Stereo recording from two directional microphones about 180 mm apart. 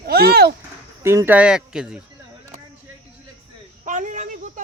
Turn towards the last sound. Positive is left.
turn(degrees=-45)  # may be behind; listen again after turning